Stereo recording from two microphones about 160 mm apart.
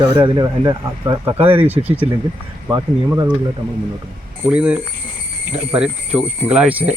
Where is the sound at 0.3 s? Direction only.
25° right (ahead or behind).